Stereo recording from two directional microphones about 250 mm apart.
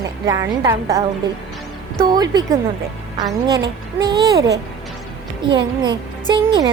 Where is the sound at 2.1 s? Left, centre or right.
Centre.